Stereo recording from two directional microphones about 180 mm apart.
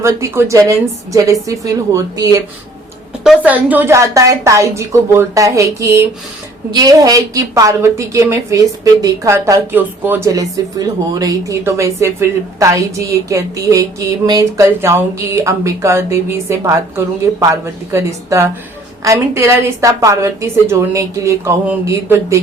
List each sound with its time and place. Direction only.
0.0 s a woman's voice: 15° right (ahead or behind)
3.2 s a woman's voice: 10° right (ahead or behind)